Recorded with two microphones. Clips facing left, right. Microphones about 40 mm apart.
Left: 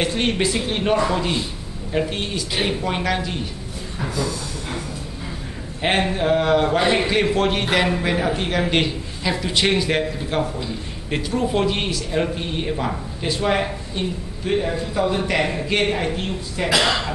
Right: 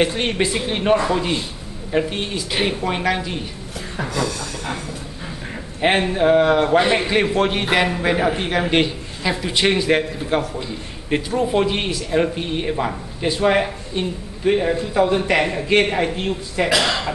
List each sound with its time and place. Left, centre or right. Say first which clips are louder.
0.0 s a man's voice: right 2 dB; centre
4.1 s a sound: right 2 dB; right
5.8 s a man's voice: right 3 dB; centre